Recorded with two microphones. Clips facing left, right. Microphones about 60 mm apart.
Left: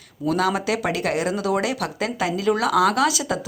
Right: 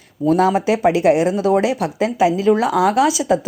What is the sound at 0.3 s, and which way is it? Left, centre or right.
Speech, right.